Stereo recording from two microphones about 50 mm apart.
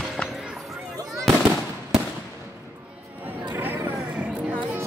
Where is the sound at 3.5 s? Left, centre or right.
Right.